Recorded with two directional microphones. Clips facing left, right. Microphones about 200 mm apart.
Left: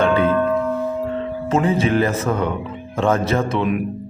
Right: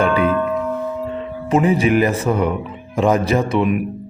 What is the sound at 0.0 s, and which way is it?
Music, 10° right (ahead or behind).